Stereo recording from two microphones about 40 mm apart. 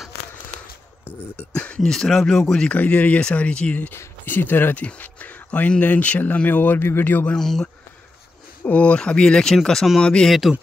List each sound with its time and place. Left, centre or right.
1.0 s a sound: left
1.5 s speech: left
1.9 s speech: centre
2.7 s speech: left
3.9 s speech: left
4.9 s speech: left
6.8 s speech: left
7.3 s speech: centre
8.6 s speech: left; by 9.6 s centre
9.8 s speech: centre